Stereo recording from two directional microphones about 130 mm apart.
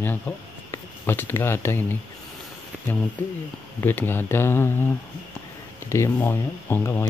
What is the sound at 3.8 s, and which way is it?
Speech, 15° left (ahead or behind).